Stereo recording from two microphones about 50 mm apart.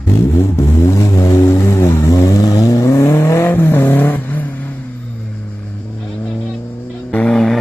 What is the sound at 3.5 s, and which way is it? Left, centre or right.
Vehicle, left.